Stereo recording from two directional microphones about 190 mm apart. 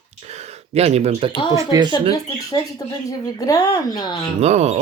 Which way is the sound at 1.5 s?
20° right (ahead or behind).